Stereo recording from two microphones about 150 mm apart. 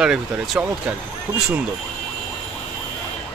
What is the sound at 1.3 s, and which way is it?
Speech, 20° right (ahead or behind).